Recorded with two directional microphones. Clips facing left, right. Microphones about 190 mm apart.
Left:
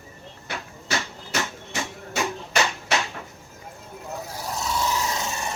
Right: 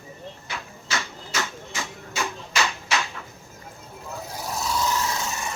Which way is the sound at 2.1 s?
60° left (ahead or behind).